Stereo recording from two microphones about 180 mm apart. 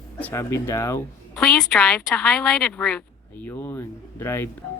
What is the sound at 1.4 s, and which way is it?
Speech, 5° left (ahead or behind).